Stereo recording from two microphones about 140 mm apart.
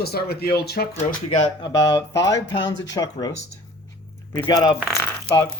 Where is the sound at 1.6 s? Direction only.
30° left (ahead or behind).